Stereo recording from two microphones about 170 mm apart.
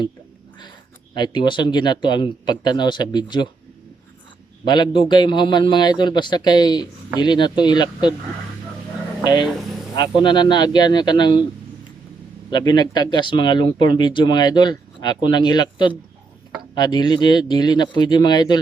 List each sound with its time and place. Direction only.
1.1 s speech: 25° left (ahead or behind)
4.6 s speech: 25° left (ahead or behind)
9.2 s speech: 25° left (ahead or behind)
12.5 s speech: 25° left (ahead or behind)